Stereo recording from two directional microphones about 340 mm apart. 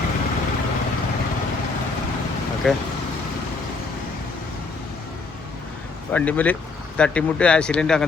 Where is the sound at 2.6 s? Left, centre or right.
Centre.